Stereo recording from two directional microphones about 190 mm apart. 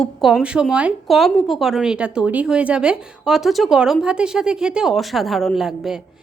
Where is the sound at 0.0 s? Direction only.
Centre (ahead or behind).